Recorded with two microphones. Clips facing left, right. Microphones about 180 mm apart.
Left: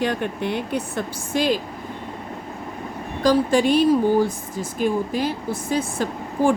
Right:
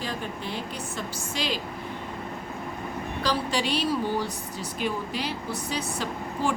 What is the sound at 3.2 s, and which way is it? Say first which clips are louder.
Speech: left 10 dB; 50° left (ahead or behind).